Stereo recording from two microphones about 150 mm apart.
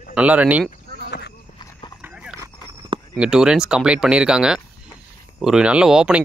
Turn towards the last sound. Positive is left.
turn(degrees=-5)  # may be behind; listen again after turning